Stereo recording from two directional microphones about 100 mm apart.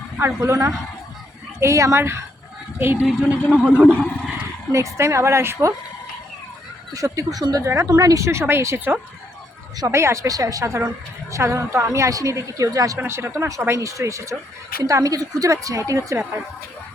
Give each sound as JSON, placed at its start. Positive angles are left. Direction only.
{"t": 0.2, "sound": "a man's voice", "side_deg": -25}
{"t": 3.8, "sound": "a man's voice", "side_deg": 10}
{"t": 4.7, "sound": "speech", "side_deg": -30}
{"t": 6.9, "sound": "speech", "side_deg": -35}